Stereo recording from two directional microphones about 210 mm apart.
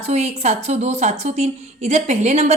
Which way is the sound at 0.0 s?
30° right (ahead or behind).